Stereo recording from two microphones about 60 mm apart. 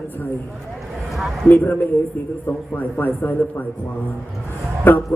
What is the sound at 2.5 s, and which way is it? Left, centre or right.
A man's voice, left.